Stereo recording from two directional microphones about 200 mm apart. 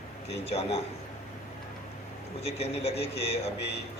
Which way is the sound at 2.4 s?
30° left (ahead or behind).